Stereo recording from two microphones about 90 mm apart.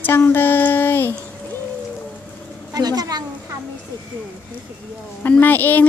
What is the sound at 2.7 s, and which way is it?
Speech, 45° right (ahead or behind).